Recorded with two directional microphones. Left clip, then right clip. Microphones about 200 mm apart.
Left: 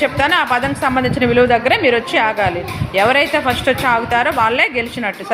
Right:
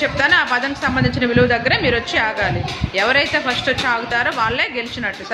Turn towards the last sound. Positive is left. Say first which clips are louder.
# left 4 dB
turn(degrees=15)  # may be behind; listen again after turning